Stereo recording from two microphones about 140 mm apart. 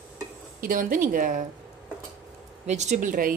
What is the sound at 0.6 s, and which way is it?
Speech, 80° right.